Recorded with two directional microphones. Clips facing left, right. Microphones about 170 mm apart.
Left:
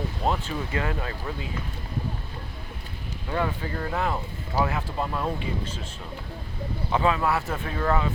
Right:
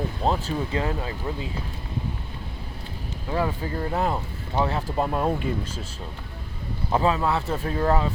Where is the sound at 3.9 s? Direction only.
35° right (ahead or behind).